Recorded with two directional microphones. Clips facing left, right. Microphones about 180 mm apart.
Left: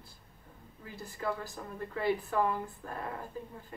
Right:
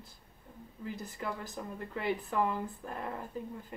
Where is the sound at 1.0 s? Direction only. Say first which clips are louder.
Left 6 dB; 20° right (ahead or behind).